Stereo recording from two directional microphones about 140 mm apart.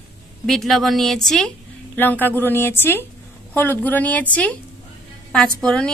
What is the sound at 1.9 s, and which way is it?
A woman's voice, 15° left (ahead or behind).